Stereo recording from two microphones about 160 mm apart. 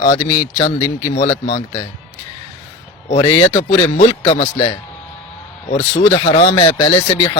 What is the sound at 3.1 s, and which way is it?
Speech, 35° left (ahead or behind).